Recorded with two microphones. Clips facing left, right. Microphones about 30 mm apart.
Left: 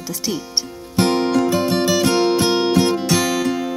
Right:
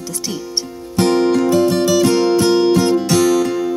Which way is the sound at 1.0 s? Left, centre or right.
Centre.